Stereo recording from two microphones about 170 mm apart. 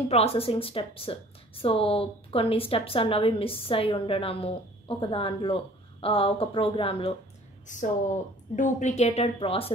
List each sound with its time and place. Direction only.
0.1 s a woman's voice: 35° left (ahead or behind)
7.6 s a woman's voice: 45° left (ahead or behind)